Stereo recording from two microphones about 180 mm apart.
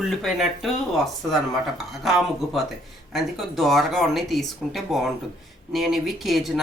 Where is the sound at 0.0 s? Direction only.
Centre (ahead or behind).